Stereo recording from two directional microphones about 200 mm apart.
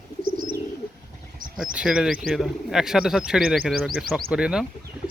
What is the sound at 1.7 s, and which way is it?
Speech, 5° right (ahead or behind).